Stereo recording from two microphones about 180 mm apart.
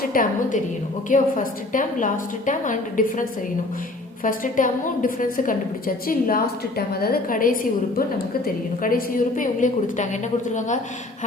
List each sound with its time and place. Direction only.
0.0 s a woman's voice: 50° left (ahead or behind)